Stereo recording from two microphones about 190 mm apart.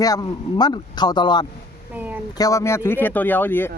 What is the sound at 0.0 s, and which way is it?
A man's voice, 20° left (ahead or behind).